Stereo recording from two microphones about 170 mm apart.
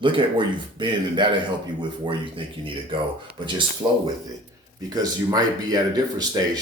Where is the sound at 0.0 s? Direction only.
25° right (ahead or behind).